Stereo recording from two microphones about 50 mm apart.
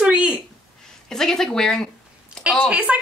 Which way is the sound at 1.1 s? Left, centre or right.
Centre.